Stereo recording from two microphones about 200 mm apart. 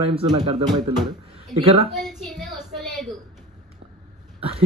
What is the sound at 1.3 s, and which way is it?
Speech, 30° right (ahead or behind).